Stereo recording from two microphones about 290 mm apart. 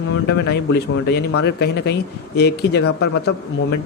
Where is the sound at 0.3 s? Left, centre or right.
Left.